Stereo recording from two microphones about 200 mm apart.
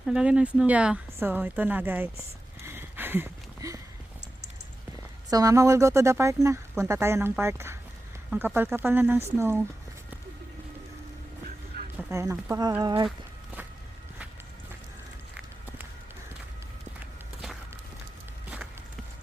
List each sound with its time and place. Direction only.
0.0 s speech: 5° right (ahead or behind)
2.6 s a sound: 10° right (ahead or behind)
5.3 s speech: 15° right (ahead or behind)
11.9 s speech: 15° right (ahead or behind)